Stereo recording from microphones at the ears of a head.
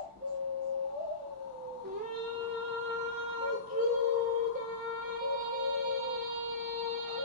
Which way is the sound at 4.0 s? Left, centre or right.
Left.